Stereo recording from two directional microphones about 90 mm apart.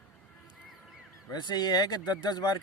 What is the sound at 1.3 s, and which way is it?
Speech, 55° left (ahead or behind).